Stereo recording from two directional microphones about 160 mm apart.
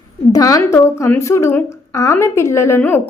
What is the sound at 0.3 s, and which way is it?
A woman's voice, 20° left (ahead or behind).